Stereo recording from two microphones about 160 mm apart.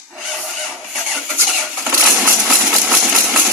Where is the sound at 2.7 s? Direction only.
5° right (ahead or behind).